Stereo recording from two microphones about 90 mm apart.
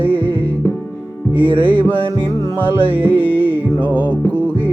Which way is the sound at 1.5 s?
70° right (ahead or behind).